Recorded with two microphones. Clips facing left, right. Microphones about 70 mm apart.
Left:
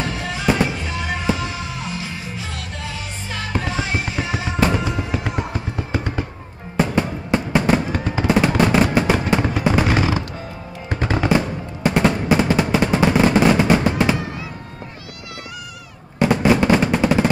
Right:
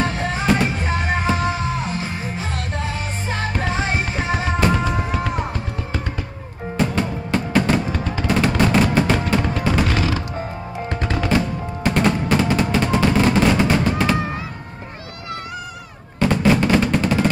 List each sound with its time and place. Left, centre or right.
0.0 s music: right
6.8 s music: centre
11.8 s machine gun: centre
16.2 s drum: centre